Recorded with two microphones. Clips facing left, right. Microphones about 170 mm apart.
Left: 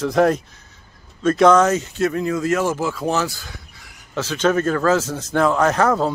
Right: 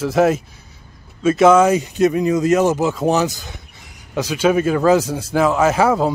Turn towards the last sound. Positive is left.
turn(degrees=-10)  # may be behind; listen again after turning